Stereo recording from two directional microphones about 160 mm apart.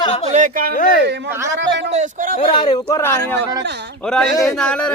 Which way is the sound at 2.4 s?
35° left (ahead or behind).